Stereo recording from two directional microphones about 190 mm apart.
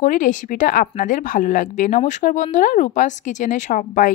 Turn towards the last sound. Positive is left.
turn(degrees=45)  # may be behind; listen again after turning